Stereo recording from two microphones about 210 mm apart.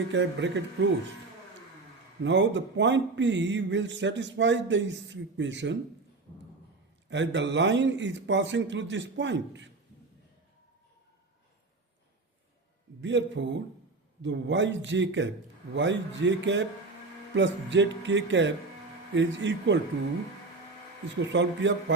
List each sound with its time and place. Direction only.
0.1 s speech: 60° right (ahead or behind)
2.2 s speech: 60° right (ahead or behind)
7.1 s speech: 55° right (ahead or behind)
13.0 s speech: 60° right (ahead or behind)
21.2 s speech: 60° right (ahead or behind)